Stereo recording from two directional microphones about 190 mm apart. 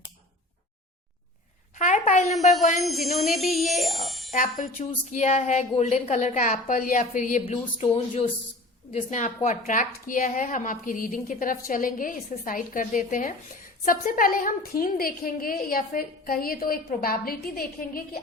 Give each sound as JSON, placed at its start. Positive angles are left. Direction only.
{"t": 1.7, "sound": "a sound", "side_deg": 40}
{"t": 3.0, "sound": "a woman's voice", "side_deg": 35}
{"t": 3.4, "sound": "speech", "side_deg": 0}
{"t": 4.3, "sound": "a woman's voice", "side_deg": 40}